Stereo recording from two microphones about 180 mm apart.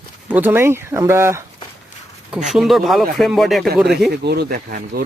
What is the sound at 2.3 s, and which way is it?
Speech, 5° right (ahead or behind).